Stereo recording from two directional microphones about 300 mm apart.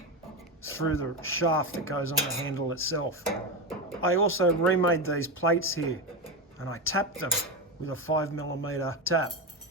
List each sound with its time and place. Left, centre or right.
0.6 s speech: left